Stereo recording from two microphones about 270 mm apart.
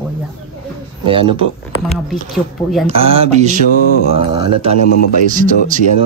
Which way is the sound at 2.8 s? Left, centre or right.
Right.